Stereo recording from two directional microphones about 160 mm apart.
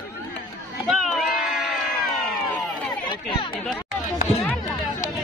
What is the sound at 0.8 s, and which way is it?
Crowd, centre (ahead or behind).